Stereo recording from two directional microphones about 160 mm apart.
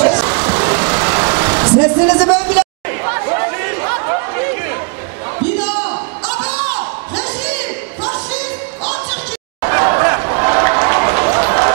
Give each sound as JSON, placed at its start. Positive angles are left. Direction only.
{"t": 0.0, "sound": "vehicle", "side_deg": -25}
{"t": 0.3, "sound": "vehicle", "side_deg": -15}
{"t": 2.3, "sound": "chatter", "side_deg": -10}
{"t": 5.6, "sound": "a sound", "side_deg": -10}